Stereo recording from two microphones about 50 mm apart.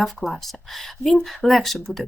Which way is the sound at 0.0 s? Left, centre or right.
Centre.